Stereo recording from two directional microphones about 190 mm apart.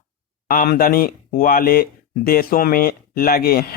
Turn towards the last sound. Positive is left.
turn(degrees=50)  # may be behind; listen again after turning